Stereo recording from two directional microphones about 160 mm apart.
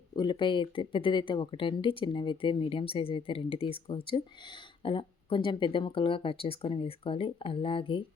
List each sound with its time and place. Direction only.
0.2 s speech: 30° left (ahead or behind)